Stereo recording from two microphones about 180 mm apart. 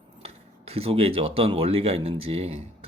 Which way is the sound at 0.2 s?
35° right (ahead or behind).